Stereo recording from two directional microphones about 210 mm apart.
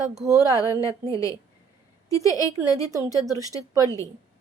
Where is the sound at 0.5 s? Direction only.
15° left (ahead or behind).